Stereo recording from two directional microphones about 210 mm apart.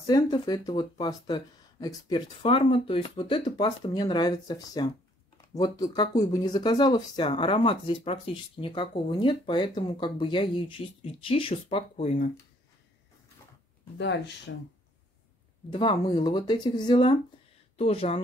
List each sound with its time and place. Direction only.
0.0 s speech: 20° left (ahead or behind)
13.9 s speech: 55° left (ahead or behind)
15.7 s speech: 25° left (ahead or behind)